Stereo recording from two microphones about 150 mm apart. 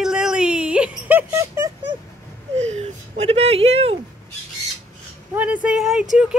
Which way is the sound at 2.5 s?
45° right (ahead or behind).